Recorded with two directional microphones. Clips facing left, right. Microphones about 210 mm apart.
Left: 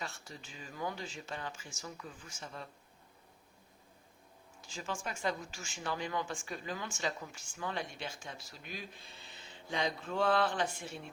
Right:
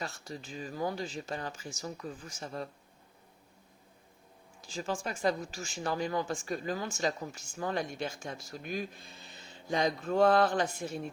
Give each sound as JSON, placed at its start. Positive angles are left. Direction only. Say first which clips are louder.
{"t": 0.0, "sound": "speech", "louder": "right 5 dB", "side_deg": -40}
{"t": 4.6, "sound": "speech", "louder": "right 5 dB", "side_deg": -35}